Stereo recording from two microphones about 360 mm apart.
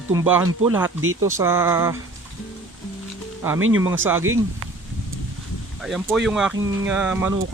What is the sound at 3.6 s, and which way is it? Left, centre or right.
Speech, right.